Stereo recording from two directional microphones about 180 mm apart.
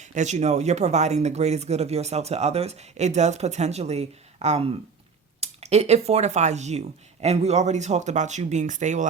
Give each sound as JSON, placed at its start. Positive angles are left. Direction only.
{"t": 0.0, "sound": "speech", "side_deg": -40}